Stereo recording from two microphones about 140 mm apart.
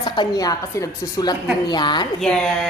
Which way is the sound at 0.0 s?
30° left (ahead or behind).